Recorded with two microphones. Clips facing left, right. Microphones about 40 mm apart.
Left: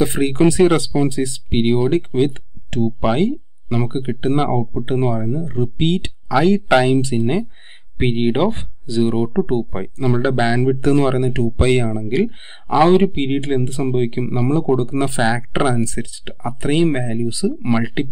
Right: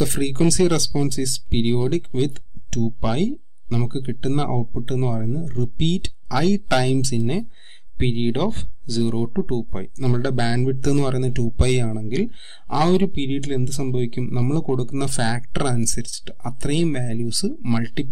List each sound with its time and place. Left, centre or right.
0.0 s speech: left